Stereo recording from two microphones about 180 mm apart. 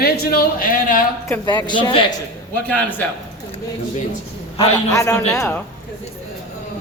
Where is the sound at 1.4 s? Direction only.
25° left (ahead or behind).